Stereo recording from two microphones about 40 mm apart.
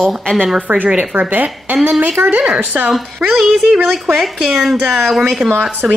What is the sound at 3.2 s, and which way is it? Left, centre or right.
Speech, centre.